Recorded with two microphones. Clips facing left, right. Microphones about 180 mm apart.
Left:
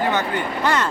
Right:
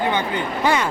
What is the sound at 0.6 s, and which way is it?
Speech, 10° right (ahead or behind).